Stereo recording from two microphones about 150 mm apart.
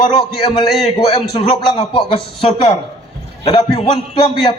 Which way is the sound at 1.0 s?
45° left (ahead or behind).